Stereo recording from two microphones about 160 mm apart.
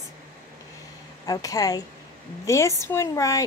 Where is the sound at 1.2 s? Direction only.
20° left (ahead or behind).